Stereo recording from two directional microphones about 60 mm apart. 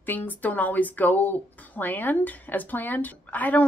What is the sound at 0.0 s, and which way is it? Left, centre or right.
A woman's voice, left.